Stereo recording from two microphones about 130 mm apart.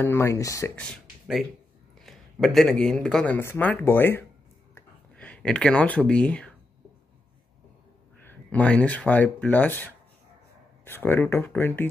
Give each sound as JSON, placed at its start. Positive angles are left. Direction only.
{"t": 0.0, "sound": "speech", "side_deg": 20}
{"t": 0.7, "sound": "a man's voice", "side_deg": 0}
{"t": 3.3, "sound": "speech", "side_deg": 15}
{"t": 8.2, "sound": "speech", "side_deg": 15}
{"t": 10.9, "sound": "speech", "side_deg": 15}